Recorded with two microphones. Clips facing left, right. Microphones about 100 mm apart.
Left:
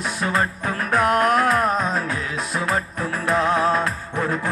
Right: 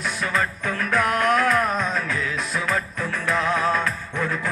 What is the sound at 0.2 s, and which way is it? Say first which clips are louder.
Music: left 3 dB; 40° left (ahead or behind).